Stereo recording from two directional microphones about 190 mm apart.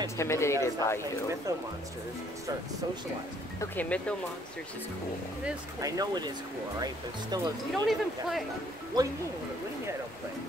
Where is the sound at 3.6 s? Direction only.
10° left (ahead or behind).